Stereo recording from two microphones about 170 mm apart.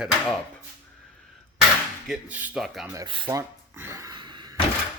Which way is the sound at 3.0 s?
30° right (ahead or behind).